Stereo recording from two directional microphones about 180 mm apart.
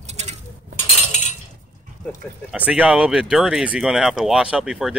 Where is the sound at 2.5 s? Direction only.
5° right (ahead or behind).